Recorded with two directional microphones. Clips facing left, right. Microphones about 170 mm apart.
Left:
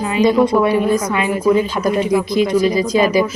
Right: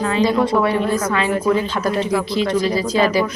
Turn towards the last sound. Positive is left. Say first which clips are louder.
# left 3 dB
turn(degrees=15)  # may be behind; listen again after turning